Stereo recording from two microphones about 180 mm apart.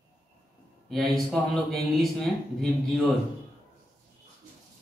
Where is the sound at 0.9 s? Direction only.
Centre (ahead or behind).